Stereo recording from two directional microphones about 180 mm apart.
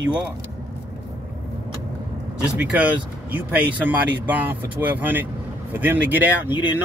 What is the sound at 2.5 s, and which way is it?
Speech, 5° right (ahead or behind).